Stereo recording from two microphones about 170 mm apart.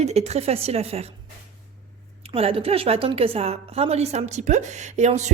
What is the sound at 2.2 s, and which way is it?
A woman's voice, 35° right (ahead or behind).